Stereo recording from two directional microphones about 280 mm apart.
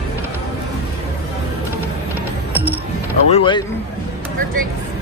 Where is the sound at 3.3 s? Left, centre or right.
Centre.